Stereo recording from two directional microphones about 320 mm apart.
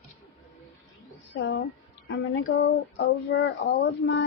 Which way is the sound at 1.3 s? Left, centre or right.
Left.